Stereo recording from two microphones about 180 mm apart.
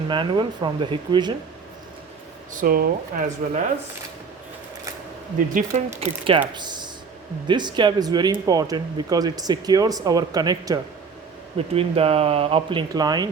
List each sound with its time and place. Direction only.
0.1 s speech: 25° right (ahead or behind)
2.5 s speech: 50° right (ahead or behind)
5.5 s speech: 40° right (ahead or behind); by 10.8 s 20° right (ahead or behind)
11.5 s speech: 35° right (ahead or behind)